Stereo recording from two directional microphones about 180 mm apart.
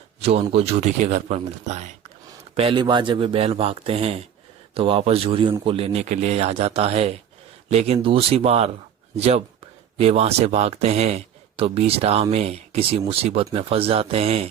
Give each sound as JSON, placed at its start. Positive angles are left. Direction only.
{"t": 0.2, "sound": "a man's voice", "side_deg": -35}
{"t": 2.6, "sound": "speech", "side_deg": -30}